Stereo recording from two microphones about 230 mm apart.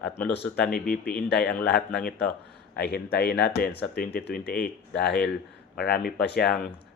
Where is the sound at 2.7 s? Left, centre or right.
Left.